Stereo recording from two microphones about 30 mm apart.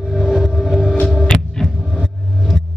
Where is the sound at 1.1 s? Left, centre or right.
Centre.